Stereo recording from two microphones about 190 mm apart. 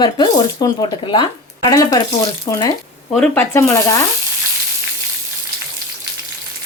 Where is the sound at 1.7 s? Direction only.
15° left (ahead or behind).